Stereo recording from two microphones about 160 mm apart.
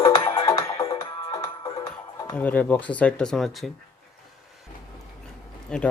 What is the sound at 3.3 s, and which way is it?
Speech, centre (ahead or behind).